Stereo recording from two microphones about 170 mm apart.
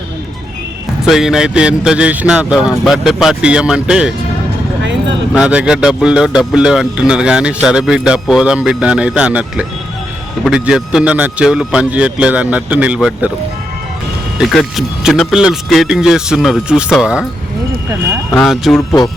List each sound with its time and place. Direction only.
1.0 s speech: centre (ahead or behind)
4.8 s vehicle: 90° right
5.3 s speech: 5° right (ahead or behind)
14.3 s speech: centre (ahead or behind)
18.3 s speech: centre (ahead or behind)